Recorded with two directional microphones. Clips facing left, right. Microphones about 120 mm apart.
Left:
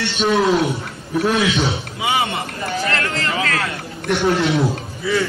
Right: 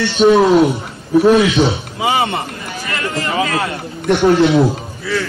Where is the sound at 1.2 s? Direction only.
25° right (ahead or behind).